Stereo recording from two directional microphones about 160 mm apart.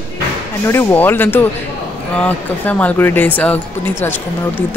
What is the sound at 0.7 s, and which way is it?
Speech, 15° left (ahead or behind).